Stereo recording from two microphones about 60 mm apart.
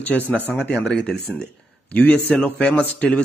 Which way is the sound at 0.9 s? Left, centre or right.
Centre.